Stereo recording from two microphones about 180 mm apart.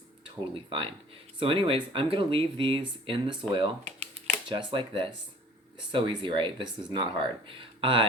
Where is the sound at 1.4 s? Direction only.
30° right (ahead or behind).